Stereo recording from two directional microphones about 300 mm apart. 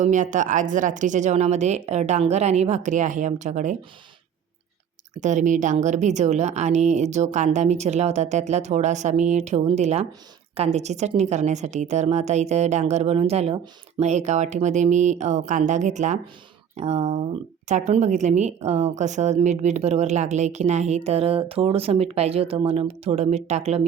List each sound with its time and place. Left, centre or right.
0.0 s a woman's voice: right
5.2 s a woman's voice: right